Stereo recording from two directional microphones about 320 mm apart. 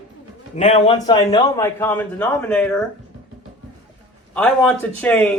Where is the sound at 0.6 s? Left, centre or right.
Centre.